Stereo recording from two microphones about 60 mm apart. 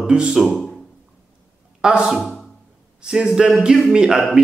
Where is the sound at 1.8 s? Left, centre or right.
Centre.